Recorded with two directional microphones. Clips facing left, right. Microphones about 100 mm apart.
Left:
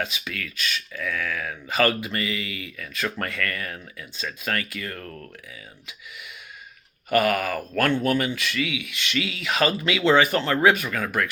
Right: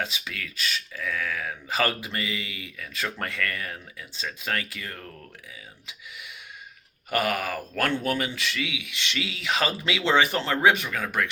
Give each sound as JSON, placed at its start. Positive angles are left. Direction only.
{"t": 0.0, "sound": "speech", "side_deg": -30}
{"t": 7.1, "sound": "speech", "side_deg": -25}